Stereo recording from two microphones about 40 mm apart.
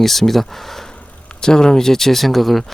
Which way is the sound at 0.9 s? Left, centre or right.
Centre.